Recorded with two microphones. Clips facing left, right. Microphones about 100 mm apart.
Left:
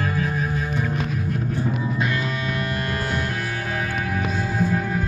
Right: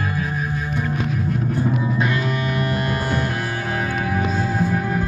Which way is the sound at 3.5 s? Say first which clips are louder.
Right 3 dB; 35° right (ahead or behind).